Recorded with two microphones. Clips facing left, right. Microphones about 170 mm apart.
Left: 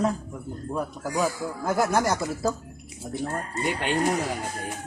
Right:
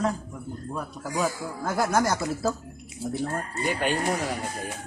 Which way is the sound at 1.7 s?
Centre (ahead or behind).